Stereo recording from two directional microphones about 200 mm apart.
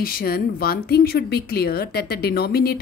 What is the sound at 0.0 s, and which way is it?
A woman's voice, 45° left (ahead or behind).